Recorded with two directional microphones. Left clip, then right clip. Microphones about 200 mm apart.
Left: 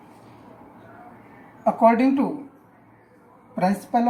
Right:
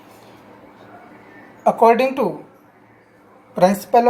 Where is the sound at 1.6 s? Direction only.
40° right (ahead or behind).